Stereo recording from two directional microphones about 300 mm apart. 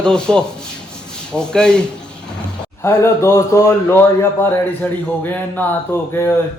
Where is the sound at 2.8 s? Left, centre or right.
Centre.